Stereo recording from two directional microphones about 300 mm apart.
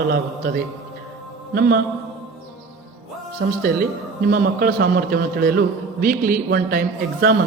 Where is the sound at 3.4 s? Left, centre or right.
Right.